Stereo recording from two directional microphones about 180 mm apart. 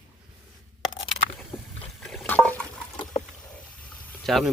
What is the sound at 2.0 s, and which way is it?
Water, 5° left (ahead or behind).